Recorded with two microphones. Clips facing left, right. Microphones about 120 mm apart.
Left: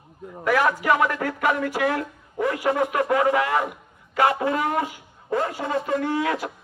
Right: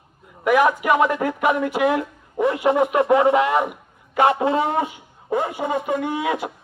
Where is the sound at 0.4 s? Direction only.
20° right (ahead or behind).